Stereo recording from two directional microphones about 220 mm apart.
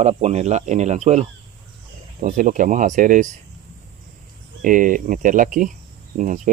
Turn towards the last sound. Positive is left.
turn(degrees=-35)  # may be behind; listen again after turning